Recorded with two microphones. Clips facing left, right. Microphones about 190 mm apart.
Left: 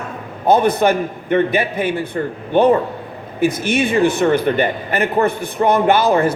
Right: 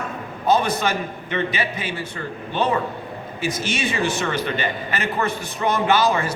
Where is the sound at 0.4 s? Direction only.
55° left (ahead or behind).